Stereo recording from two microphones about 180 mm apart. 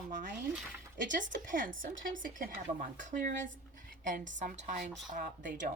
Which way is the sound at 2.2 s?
50° right (ahead or behind).